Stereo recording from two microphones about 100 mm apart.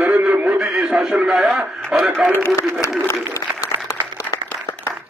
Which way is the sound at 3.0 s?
30° left (ahead or behind).